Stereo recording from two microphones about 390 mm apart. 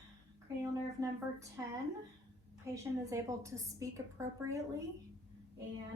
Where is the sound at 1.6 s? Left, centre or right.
Centre.